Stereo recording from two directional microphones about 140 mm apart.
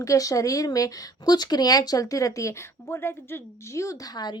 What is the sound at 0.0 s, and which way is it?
A woman's voice, 25° left (ahead or behind).